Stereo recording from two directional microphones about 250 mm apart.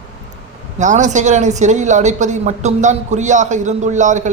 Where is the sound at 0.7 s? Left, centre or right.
Right.